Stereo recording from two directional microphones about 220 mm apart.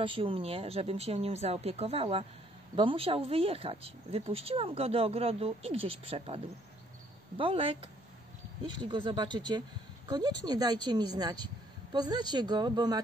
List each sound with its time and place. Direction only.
0.0 s speech: 25° right (ahead or behind)